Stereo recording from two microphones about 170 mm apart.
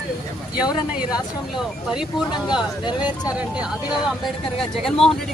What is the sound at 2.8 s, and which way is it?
Speech, 25° left (ahead or behind).